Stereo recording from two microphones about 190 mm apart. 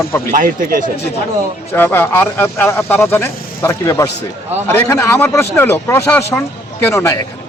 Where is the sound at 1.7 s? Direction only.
10° left (ahead or behind).